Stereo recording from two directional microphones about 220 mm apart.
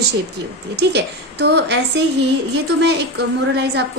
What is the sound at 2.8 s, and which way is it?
Speech, 50° right (ahead or behind).